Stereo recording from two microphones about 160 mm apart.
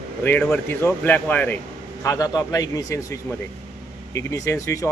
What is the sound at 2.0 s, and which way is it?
Speech, 20° left (ahead or behind).